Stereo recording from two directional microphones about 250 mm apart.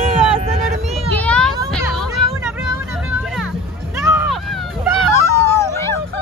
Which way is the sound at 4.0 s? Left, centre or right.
Centre.